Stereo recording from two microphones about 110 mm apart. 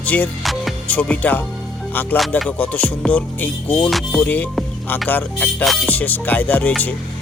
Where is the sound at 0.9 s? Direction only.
10° left (ahead or behind).